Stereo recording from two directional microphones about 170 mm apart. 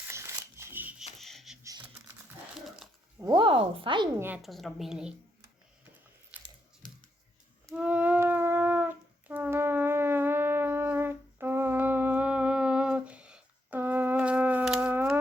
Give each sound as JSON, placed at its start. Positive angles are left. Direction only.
{"t": 0.1, "sound": "scissors", "side_deg": -15}
{"t": 1.2, "sound": "a sound", "side_deg": 0}
{"t": 1.6, "sound": "typing", "side_deg": -20}
{"t": 2.6, "sound": "a sound", "side_deg": 0}
{"t": 3.2, "sound": "speech", "side_deg": -20}
{"t": 3.4, "sound": "speech", "side_deg": -30}
{"t": 4.4, "sound": "a woman's voice", "side_deg": 0}
{"t": 6.3, "sound": "biting", "side_deg": -10}
{"t": 7.8, "sound": "a sound", "side_deg": -10}
{"t": 9.3, "sound": "shofar", "side_deg": -10}